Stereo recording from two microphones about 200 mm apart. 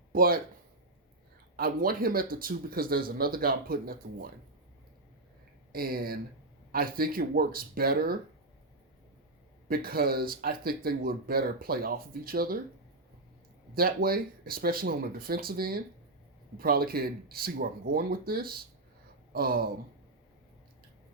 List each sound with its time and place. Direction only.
0.1 s speech: 45° right (ahead or behind)
1.5 s speech: 50° right (ahead or behind)
5.7 s speech: 50° right (ahead or behind)
9.6 s speech: 50° right (ahead or behind)
13.7 s speech: 50° right (ahead or behind)
19.3 s a sound: 50° right (ahead or behind)